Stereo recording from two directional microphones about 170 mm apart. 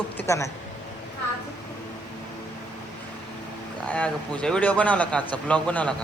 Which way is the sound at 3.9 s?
10° left (ahead or behind).